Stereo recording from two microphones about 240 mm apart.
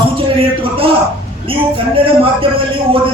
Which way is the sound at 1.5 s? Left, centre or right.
Right.